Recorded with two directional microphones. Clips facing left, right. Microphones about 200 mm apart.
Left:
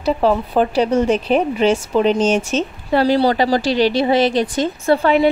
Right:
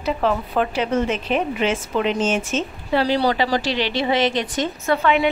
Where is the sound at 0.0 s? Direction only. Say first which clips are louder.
Left 5 dB; 35° left (ahead or behind).